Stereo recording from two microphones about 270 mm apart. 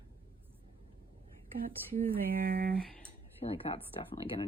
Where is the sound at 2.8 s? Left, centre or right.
Centre.